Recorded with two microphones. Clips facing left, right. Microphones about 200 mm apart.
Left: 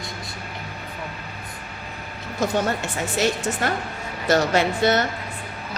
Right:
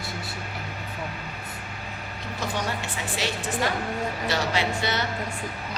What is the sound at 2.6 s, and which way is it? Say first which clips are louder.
A woman's voice: left 6 dB; 45° left (ahead or behind).